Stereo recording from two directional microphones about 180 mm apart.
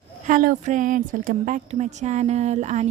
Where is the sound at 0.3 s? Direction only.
50° right (ahead or behind).